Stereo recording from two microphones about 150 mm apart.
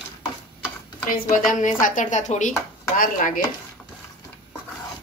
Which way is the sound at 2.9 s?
65° left (ahead or behind).